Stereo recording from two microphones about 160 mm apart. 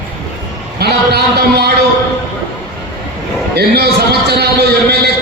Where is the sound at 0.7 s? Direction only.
85° right.